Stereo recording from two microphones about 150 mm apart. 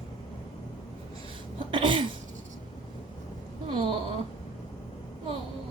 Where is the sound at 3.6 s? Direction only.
35° right (ahead or behind).